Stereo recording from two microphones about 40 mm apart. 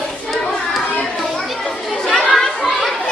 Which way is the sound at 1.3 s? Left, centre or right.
Centre.